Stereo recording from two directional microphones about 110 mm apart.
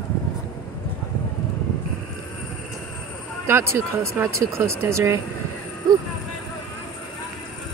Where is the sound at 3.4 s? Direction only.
25° right (ahead or behind).